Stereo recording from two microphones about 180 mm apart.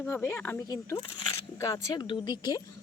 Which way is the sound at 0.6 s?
20° left (ahead or behind).